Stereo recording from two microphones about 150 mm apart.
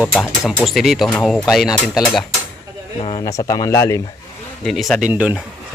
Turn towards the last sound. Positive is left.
turn(degrees=-10)  # may be behind; listen again after turning